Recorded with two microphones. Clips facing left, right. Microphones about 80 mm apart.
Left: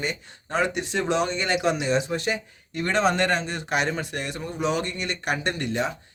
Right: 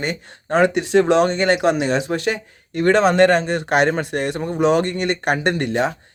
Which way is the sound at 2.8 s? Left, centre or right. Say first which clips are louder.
Right 9 dB; right.